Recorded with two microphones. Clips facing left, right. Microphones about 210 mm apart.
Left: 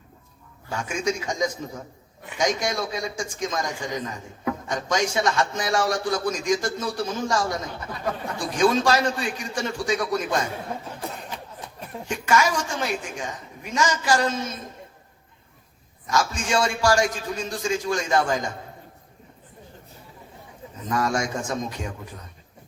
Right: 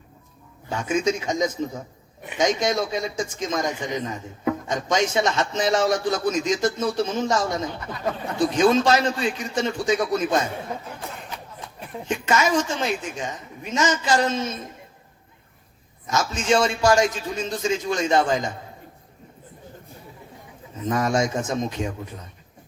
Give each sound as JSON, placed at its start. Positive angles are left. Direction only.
{"t": 0.7, "sound": "a man's voice", "side_deg": -20}
{"t": 12.0, "sound": "a man's voice", "side_deg": -20}
{"t": 16.0, "sound": "a man's voice", "side_deg": -20}
{"t": 20.9, "sound": "a man's voice", "side_deg": -20}